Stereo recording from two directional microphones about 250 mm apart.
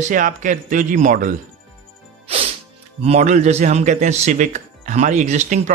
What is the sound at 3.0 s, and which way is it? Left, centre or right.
Speech, right.